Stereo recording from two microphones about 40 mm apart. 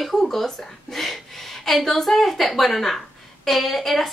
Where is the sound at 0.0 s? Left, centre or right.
Centre.